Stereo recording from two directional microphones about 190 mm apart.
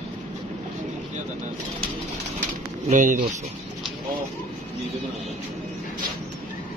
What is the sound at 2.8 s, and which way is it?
Speech, 45° right (ahead or behind).